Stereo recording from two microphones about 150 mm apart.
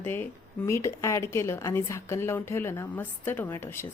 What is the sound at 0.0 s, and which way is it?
A woman's voice, 15° left (ahead or behind).